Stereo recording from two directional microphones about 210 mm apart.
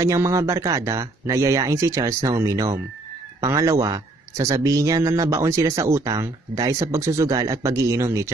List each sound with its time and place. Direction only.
0.0 s speech: 15° right (ahead or behind)